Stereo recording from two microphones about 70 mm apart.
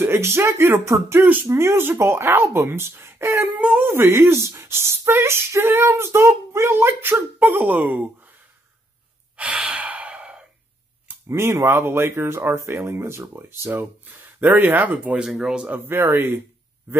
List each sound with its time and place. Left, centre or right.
0.0 s speech: right
3.5 s speech: centre
3.8 s speech: right
9.4 s sigh: centre
11.2 s speech: right
15.2 s a man's voice: centre
15.7 s speech: right